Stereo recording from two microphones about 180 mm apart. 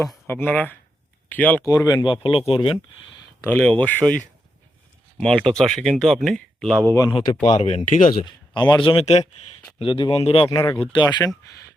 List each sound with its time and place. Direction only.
0.0 s speech: centre (ahead or behind)
1.6 s speech: 20° left (ahead or behind)
3.5 s speech: 10° left (ahead or behind)
6.9 s speech: 20° left (ahead or behind)
7.5 s speech: 35° left (ahead or behind)
8.2 s speech: 25° left (ahead or behind)
10.5 s speech: 15° left (ahead or behind)